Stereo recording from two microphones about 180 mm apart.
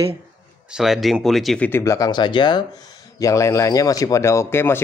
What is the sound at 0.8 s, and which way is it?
Speech, centre (ahead or behind).